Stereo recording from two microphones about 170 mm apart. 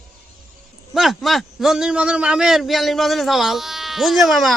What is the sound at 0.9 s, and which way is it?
A man's voice, centre (ahead or behind).